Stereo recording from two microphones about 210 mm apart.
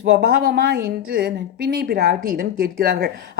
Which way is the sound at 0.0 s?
55° right (ahead or behind).